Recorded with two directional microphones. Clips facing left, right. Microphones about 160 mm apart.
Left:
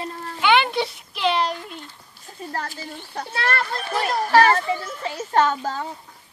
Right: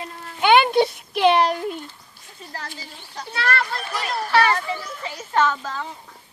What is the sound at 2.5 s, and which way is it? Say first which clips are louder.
Speech: left 5 dB; 55° left (ahead or behind).